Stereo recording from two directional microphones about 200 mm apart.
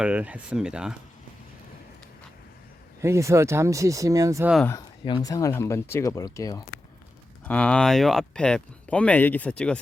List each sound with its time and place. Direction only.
0.0 s speech: 5° right (ahead or behind)
3.0 s speech: 15° right (ahead or behind)
4.7 s speech: 20° left (ahead or behind)
7.4 s speech: 5° left (ahead or behind)